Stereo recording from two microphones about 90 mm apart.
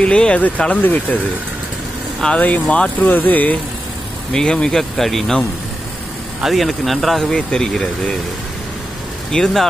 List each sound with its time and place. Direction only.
0.0 s speech: 10° left (ahead or behind)
4.3 s speech: 10° left (ahead or behind)
6.4 s speech: centre (ahead or behind)
9.3 s speech: 5° left (ahead or behind)